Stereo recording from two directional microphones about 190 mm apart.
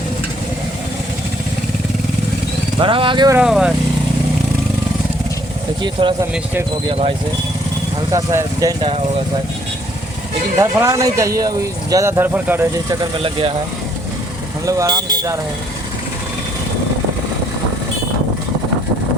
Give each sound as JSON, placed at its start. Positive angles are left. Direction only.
{"t": 2.7, "sound": "speech", "side_deg": -25}
{"t": 3.3, "sound": "speech", "side_deg": -5}
{"t": 5.8, "sound": "speech", "side_deg": -25}
{"t": 6.3, "sound": "speech", "side_deg": -10}
{"t": 6.8, "sound": "speech", "side_deg": -30}
{"t": 8.1, "sound": "speech", "side_deg": -15}
{"t": 8.8, "sound": "speech", "side_deg": -30}
{"t": 10.6, "sound": "speech", "side_deg": -15}
{"t": 14.6, "sound": "speech", "side_deg": -20}